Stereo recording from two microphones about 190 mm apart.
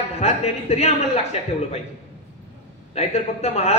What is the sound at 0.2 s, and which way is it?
A man's voice, 35° left (ahead or behind).